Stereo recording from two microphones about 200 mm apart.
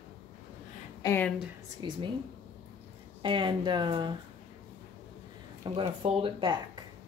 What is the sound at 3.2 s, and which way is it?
Speech, 25° right (ahead or behind).